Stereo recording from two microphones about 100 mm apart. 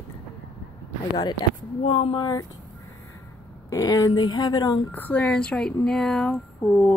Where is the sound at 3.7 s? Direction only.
35° left (ahead or behind).